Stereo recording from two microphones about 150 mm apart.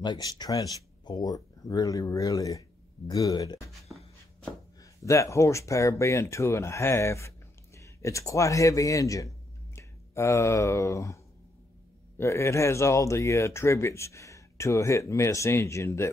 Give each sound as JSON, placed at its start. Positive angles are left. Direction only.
{"t": 0.0, "sound": "speech", "side_deg": 30}
{"t": 5.0, "sound": "speech", "side_deg": 20}
{"t": 12.2, "sound": "speech", "side_deg": 20}